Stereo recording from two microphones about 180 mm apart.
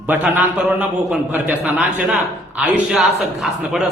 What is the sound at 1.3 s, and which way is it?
A man's voice, 10° right (ahead or behind).